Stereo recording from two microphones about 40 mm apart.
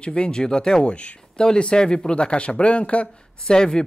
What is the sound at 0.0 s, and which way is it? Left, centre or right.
Speech, left.